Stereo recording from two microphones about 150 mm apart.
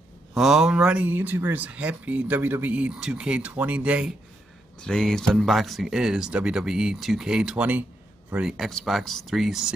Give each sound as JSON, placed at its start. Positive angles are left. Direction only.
{"t": 0.3, "sound": "speech", "side_deg": 0}
{"t": 4.7, "sound": "speech", "side_deg": 5}